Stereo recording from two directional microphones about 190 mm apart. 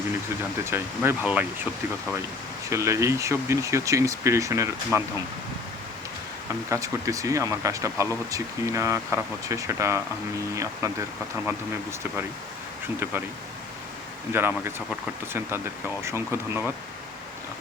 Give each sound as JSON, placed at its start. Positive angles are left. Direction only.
{"t": 0.6, "sound": "speech", "side_deg": -10}
{"t": 2.6, "sound": "speech", "side_deg": -15}
{"t": 6.7, "sound": "speech", "side_deg": -15}
{"t": 14.3, "sound": "speech", "side_deg": -10}